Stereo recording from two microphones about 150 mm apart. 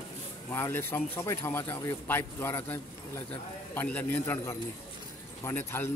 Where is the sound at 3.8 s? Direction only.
10° left (ahead or behind).